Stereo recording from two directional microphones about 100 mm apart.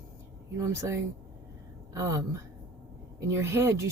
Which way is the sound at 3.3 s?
25° right (ahead or behind).